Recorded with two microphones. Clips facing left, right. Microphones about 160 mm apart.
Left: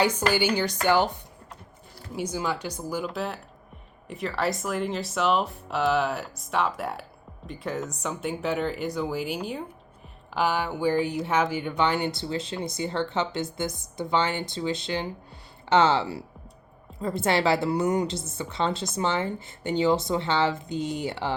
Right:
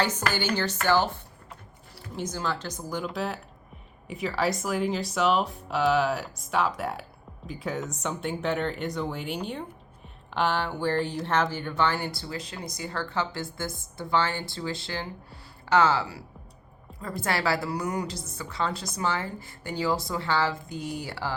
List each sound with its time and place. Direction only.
0.0 s speech: 10° left (ahead or behind)
2.1 s speech: 10° left (ahead or behind)